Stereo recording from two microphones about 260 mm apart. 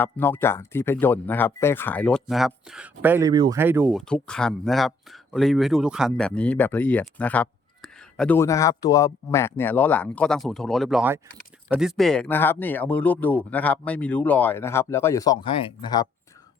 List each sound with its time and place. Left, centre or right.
0.0 s speech: centre